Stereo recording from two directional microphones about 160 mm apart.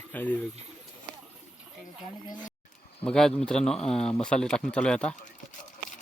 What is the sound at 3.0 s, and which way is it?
Speech, 5° left (ahead or behind).